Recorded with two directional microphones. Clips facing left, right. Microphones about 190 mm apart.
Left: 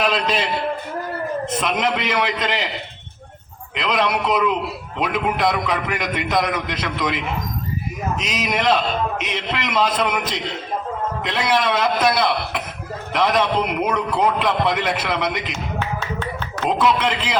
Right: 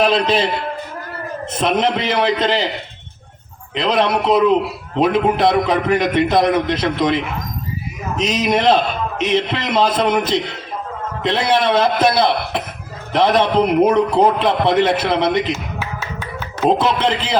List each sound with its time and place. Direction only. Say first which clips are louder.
0.0 s a man's voice: right 5 dB; 30° right (ahead or behind)
1.6 s a man's voice: right 7 dB; 30° right (ahead or behind)
3.8 s a man's voice: right 4 dB; 30° right (ahead or behind)
8.2 s a man's voice: right 8 dB; 30° right (ahead or behind)
15.8 s a sound: left 2 dB; 5° right (ahead or behind)
16.6 s a man's voice: right 3 dB; 30° right (ahead or behind)